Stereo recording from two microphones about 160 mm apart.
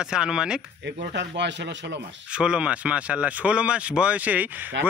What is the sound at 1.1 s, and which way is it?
Speech, 90° right.